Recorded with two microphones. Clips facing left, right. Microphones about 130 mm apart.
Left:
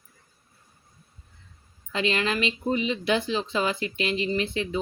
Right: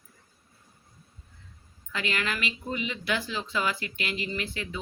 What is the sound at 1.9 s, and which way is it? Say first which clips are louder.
Speech: left 5 dB; 25° left (ahead or behind).